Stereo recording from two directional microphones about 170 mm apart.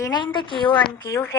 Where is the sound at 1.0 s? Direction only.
15° left (ahead or behind).